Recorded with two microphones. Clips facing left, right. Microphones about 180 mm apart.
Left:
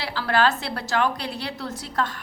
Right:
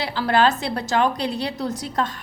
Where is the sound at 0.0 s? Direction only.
20° right (ahead or behind).